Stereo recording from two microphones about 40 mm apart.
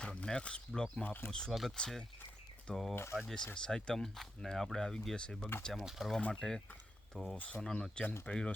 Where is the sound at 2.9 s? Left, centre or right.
Left.